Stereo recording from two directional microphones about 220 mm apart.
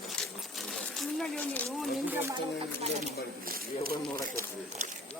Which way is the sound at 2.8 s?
35° right (ahead or behind).